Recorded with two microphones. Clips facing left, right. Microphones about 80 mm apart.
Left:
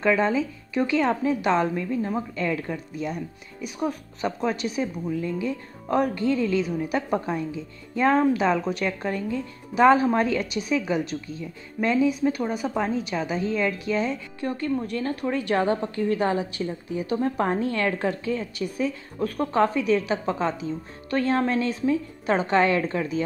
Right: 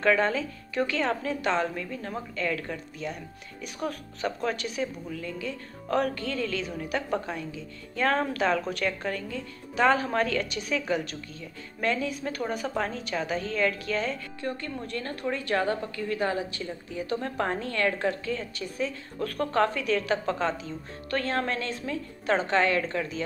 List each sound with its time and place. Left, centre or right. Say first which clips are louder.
0.0 s a woman's voice: left 2 dB; centre
6.6 s a woman's voice: left 7 dB; centre
6.9 s a woman's voice: left 4 dB; left
12.1 s a woman's voice: left 7 dB; centre
15.5 s a woman's voice: left 4 dB; left